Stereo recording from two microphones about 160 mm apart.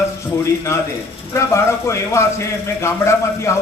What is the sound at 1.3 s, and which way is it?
Speech, 15° left (ahead or behind).